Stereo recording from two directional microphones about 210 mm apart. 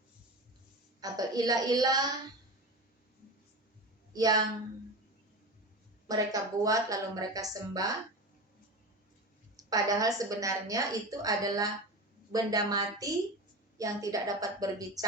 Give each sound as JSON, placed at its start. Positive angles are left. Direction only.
{"t": 1.0, "sound": "a woman's voice", "side_deg": -15}
{"t": 4.1, "sound": "a woman's voice", "side_deg": -15}
{"t": 6.1, "sound": "a woman's voice", "side_deg": -15}
{"t": 9.6, "sound": "a woman's voice", "side_deg": -15}